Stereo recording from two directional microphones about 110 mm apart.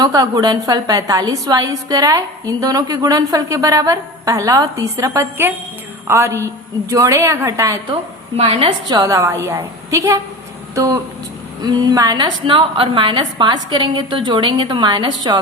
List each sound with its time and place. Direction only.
0.0 s a woman's voice: 35° right (ahead or behind)
8.4 s a woman's voice: 60° right (ahead or behind)
8.9 s a woman's voice: 35° right (ahead or behind)